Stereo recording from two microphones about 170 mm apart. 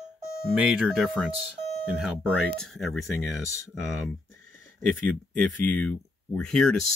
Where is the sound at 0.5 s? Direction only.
5° right (ahead or behind).